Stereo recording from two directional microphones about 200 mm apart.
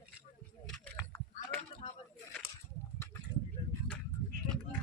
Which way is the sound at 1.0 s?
10° left (ahead or behind).